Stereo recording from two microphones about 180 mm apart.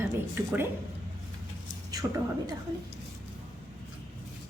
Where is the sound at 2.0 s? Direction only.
20° right (ahead or behind).